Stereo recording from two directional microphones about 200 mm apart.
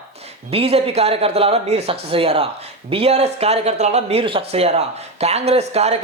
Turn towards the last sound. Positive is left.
turn(degrees=-30)  # may be behind; listen again after turning